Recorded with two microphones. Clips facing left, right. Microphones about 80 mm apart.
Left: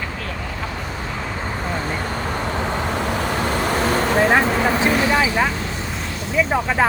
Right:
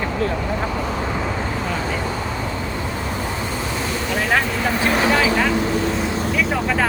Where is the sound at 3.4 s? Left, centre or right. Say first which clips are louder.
Left 5 dB; left.